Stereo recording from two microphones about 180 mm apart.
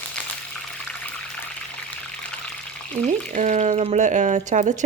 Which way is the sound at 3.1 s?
40° right (ahead or behind).